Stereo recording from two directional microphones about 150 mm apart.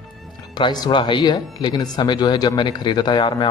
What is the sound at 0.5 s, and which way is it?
Speech, 30° left (ahead or behind).